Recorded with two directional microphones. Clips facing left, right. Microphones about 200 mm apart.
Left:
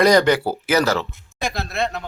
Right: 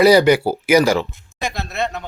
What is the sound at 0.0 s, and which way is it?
Speech, 5° right (ahead or behind).